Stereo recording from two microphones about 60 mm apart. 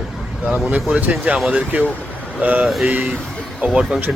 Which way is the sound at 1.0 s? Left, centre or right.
Right.